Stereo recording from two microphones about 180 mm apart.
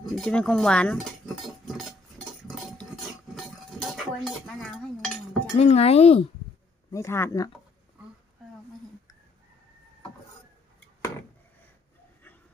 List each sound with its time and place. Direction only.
0.0 s speech: 5° left (ahead or behind)
1.6 s cutlery: centre (ahead or behind)
5.5 s speech: 35° left (ahead or behind)
6.9 s speech: 15° left (ahead or behind)